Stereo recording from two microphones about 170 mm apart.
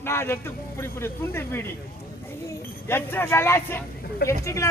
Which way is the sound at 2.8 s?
15° left (ahead or behind).